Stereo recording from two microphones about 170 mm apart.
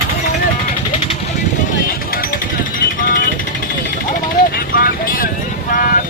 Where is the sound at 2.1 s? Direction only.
60° left (ahead or behind).